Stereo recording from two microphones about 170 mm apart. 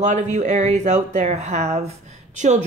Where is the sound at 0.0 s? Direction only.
45° right (ahead or behind).